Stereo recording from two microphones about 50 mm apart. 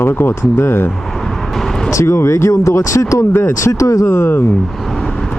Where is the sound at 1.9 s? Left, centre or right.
Left.